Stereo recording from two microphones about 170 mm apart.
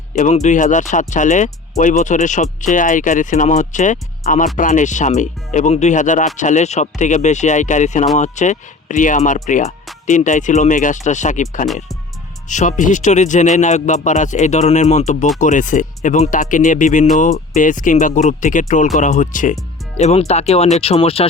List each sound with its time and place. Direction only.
0.2 s speech: 45° left (ahead or behind)